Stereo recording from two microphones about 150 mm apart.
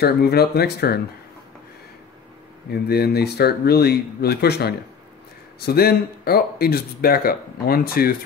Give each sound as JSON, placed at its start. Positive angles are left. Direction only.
{"t": 0.0, "sound": "speech", "side_deg": 90}
{"t": 2.7, "sound": "speech", "side_deg": 90}